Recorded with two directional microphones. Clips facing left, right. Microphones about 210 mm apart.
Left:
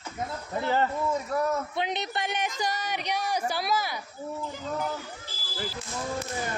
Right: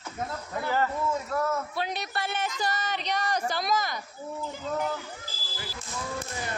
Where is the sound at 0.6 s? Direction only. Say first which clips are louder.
Left 1 dB; 25° left (ahead or behind).